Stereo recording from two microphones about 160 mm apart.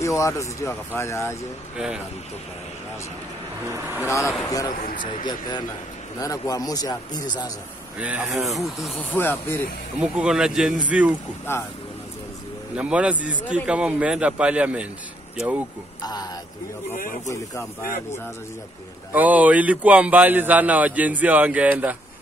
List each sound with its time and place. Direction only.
0.0 s speech: 20° left (ahead or behind)
3.6 s speech: 15° right (ahead or behind)
4.5 s speech: 20° left (ahead or behind)
8.0 s speech: 5° right (ahead or behind)
9.1 s speech: 15° left (ahead or behind)
9.9 s speech: 5° right (ahead or behind)
11.5 s speech: 15° left (ahead or behind)
12.7 s speech: 5° right (ahead or behind)
16.0 s speech: 25° left (ahead or behind)
19.1 s speech: 10° right (ahead or behind)